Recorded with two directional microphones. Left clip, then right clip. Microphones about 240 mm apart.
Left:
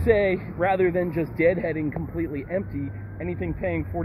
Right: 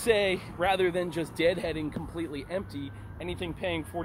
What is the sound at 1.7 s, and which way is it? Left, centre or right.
Speech, right.